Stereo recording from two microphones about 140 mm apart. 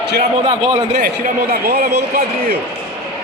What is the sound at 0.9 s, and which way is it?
Speech, 80° right.